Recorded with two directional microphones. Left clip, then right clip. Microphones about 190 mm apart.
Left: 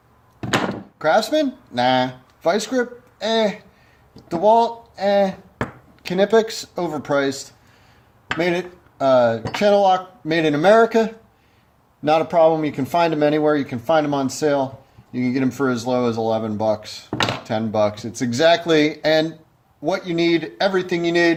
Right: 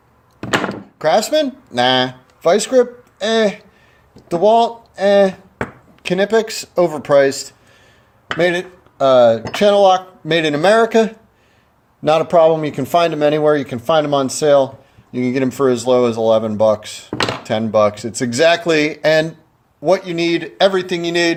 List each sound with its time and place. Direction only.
0.9 s speech: 35° right (ahead or behind)
8.4 s speech: 40° right (ahead or behind)